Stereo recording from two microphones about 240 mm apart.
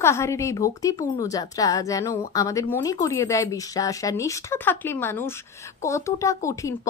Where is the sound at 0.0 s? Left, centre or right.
Centre.